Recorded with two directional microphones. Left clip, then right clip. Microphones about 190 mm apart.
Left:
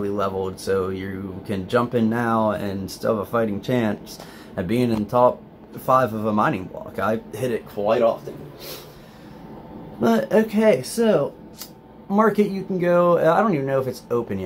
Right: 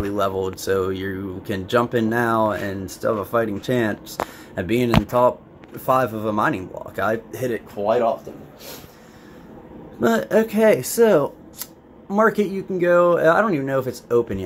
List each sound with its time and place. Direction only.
0.0 s speech: 15° right (ahead or behind)
9.9 s speech: 10° right (ahead or behind); by 11.2 s 30° right (ahead or behind)
12.1 s speech: 10° right (ahead or behind)